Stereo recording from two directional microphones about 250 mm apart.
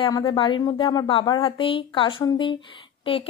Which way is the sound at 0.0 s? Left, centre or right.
Centre.